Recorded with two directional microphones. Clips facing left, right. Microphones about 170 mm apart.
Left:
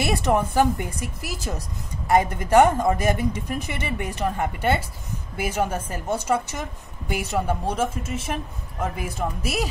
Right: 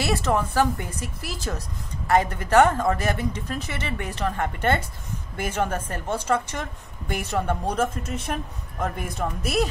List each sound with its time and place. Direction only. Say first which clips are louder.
0.0 s a woman's voice: left 2 dB; 15° left (ahead or behind)